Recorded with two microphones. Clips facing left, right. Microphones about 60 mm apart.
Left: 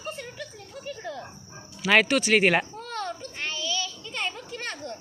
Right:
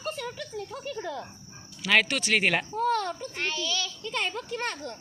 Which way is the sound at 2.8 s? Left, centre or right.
Right.